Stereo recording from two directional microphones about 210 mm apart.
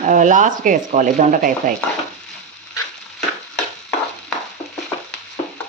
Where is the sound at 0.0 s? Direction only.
35° right (ahead or behind).